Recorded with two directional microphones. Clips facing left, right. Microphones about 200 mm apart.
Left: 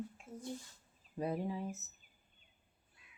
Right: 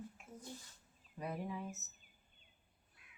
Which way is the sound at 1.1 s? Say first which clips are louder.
Left 5 dB; 30° left (ahead or behind).